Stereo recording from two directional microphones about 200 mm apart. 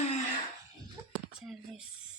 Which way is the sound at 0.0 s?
35° left (ahead or behind).